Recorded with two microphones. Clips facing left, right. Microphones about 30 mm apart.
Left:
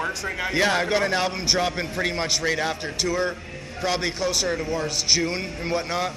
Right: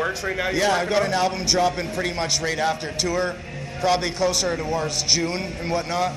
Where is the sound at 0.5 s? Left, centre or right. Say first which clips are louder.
Even; centre.